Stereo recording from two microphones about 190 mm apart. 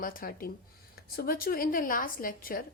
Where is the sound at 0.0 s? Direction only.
50° left (ahead or behind).